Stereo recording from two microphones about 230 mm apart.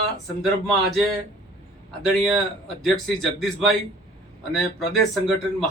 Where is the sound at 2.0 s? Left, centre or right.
Centre.